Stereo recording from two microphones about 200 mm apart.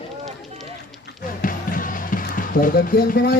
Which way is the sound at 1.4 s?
45° left (ahead or behind).